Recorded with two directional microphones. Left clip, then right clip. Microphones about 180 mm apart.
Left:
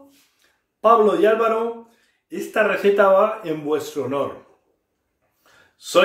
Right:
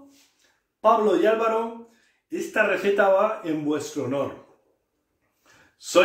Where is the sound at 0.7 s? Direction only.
15° left (ahead or behind).